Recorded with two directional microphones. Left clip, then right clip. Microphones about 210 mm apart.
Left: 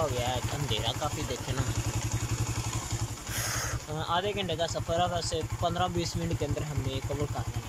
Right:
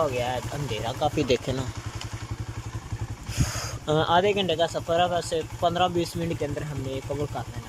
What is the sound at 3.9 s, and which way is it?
Speech, 30° right (ahead or behind).